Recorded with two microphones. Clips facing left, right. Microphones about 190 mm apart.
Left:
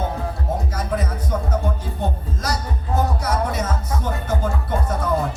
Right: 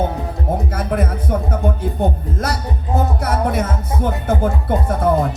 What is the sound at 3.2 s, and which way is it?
Speech, 55° right (ahead or behind).